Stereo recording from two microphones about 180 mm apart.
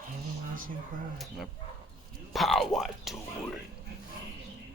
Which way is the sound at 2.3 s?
Centre (ahead or behind).